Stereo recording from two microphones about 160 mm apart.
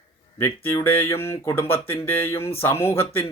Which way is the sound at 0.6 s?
15° left (ahead or behind).